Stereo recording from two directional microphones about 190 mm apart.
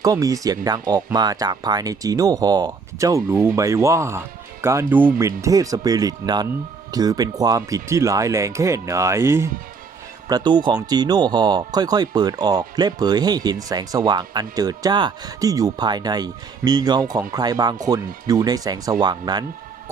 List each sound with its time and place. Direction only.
0.0 s speech: 20° right (ahead or behind)